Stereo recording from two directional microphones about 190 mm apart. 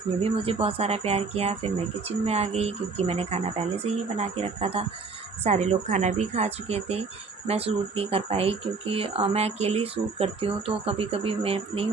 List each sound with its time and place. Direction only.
0.2 s speech: 30° right (ahead or behind)